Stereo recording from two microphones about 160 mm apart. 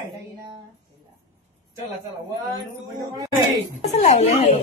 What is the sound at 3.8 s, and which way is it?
Speech, 45° left (ahead or behind).